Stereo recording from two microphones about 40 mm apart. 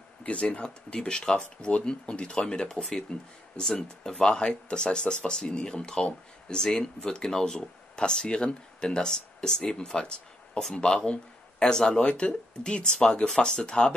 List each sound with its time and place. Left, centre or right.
0.2 s speech: left
12.0 s speech: left
13.3 s speech: centre